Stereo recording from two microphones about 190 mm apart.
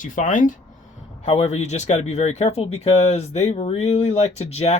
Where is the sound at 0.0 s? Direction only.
45° left (ahead or behind).